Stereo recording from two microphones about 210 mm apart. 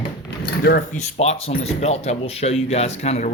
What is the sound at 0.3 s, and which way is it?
Keys jangling, 50° left (ahead or behind).